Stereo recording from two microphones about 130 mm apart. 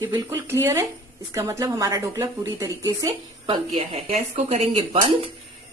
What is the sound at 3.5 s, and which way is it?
Speech, 40° right (ahead or behind).